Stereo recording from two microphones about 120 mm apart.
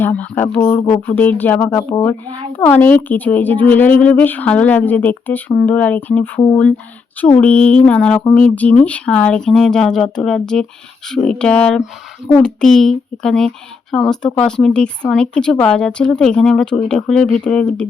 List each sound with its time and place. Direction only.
0.0 s a woman's voice: 15° left (ahead or behind)
0.6 s speech: 35° left (ahead or behind)
1.0 s a woman's voice: 15° left (ahead or behind)